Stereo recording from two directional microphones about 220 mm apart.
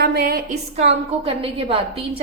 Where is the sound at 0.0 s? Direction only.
45° right (ahead or behind).